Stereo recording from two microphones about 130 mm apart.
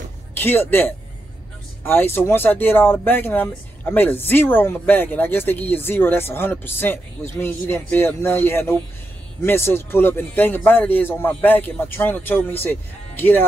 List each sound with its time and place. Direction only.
0.3 s speech: 15° left (ahead or behind)